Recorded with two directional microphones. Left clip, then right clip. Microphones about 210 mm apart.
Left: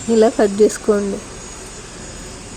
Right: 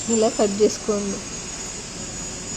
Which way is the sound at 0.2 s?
30° left (ahead or behind).